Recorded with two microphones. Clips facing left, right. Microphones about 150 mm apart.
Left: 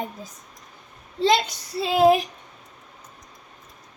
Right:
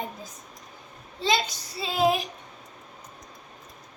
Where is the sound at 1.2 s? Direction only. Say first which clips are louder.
Left 6 dB; 60° left (ahead or behind).